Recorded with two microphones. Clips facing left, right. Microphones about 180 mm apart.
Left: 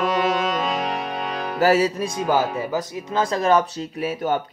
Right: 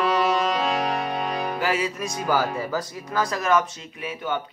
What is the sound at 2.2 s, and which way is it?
Speech, 20° left (ahead or behind).